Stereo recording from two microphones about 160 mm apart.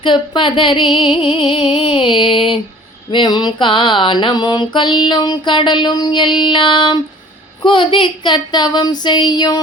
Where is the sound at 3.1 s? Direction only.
30° left (ahead or behind).